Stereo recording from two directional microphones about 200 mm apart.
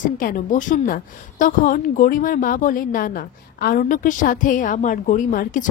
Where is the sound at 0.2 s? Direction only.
40° left (ahead or behind).